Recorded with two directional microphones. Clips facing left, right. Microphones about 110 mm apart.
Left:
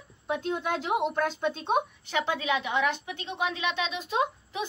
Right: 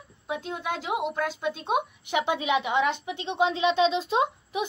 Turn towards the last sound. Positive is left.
turn(degrees=-25)  # may be behind; listen again after turning